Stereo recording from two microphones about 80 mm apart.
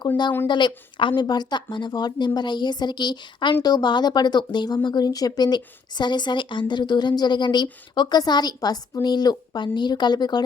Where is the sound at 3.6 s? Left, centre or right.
Left.